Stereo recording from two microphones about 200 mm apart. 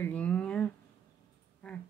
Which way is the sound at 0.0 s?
5° left (ahead or behind).